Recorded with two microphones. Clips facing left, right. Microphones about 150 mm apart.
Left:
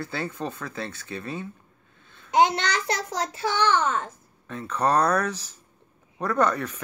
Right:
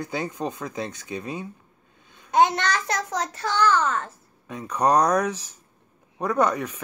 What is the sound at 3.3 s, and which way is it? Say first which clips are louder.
Speech: right 1 dB; 10° left (ahead or behind).